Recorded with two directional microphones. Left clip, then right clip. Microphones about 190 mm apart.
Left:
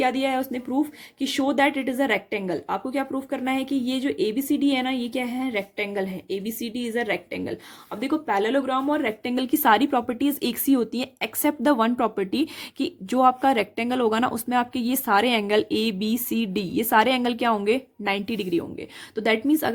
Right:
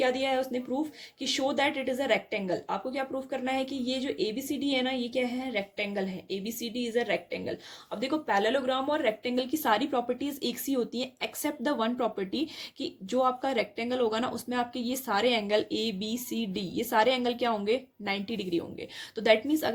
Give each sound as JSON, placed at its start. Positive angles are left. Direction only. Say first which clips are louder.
{"t": 0.0, "sound": "speech", "louder": "left 4 dB", "side_deg": 40}